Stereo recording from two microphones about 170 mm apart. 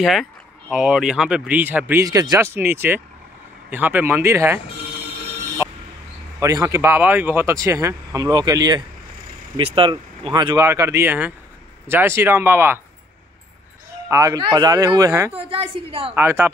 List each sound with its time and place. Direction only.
0.0 s speech: centre (ahead or behind)
6.4 s speech: 20° right (ahead or behind)
14.0 s speech: 20° right (ahead or behind)
15.3 s a woman's voice: 35° right (ahead or behind)
16.2 s speech: 15° right (ahead or behind)